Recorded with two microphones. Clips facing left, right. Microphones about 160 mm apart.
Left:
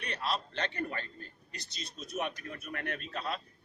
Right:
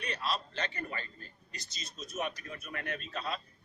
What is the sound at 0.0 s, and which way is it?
A man's voice, 60° left (ahead or behind).